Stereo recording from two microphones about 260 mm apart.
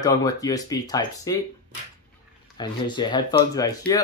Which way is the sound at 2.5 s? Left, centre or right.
Centre.